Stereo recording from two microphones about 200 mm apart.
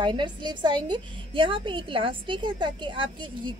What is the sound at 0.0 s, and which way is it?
A woman's voice, 25° right (ahead or behind).